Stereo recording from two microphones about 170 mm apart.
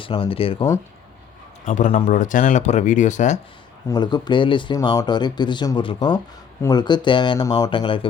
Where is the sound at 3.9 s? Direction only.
25° left (ahead or behind).